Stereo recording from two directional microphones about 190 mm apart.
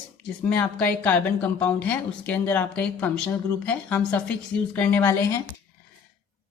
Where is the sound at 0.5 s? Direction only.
5° left (ahead or behind).